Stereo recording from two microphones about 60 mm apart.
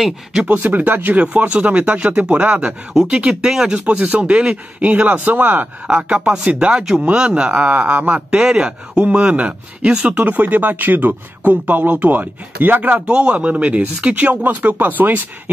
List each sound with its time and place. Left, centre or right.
0.0 s speech: centre
0.5 s speech: right
1.2 s speech: centre
2.9 s speech: centre
6.8 s a man's voice: centre
7.7 s a man's voice: right